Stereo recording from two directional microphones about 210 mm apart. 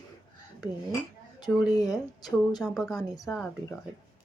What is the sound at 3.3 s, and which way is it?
Speech, 5° left (ahead or behind).